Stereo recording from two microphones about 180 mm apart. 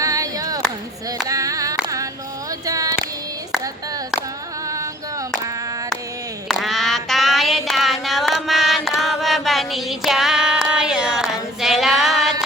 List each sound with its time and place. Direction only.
0.0 s a sound: 20° right (ahead or behind)
2.5 s female singing: 20° right (ahead or behind)
4.7 s female singing: 15° right (ahead or behind)
6.5 s music: centre (ahead or behind)